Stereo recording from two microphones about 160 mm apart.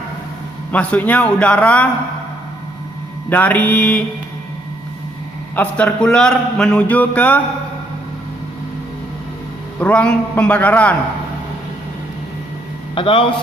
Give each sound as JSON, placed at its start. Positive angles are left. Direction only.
{"t": 0.7, "sound": "a man's voice", "side_deg": 10}
{"t": 3.2, "sound": "a man's voice", "side_deg": 10}
{"t": 5.5, "sound": "a man's voice", "side_deg": 5}
{"t": 9.8, "sound": "a man's voice", "side_deg": 5}
{"t": 12.9, "sound": "a man's voice", "side_deg": 35}